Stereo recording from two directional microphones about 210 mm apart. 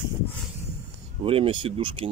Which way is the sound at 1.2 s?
25° right (ahead or behind).